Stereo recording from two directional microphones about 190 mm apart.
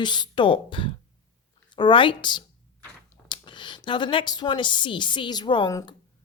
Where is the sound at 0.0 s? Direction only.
25° left (ahead or behind).